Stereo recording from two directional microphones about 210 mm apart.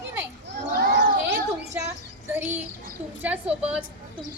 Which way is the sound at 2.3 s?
10° right (ahead or behind).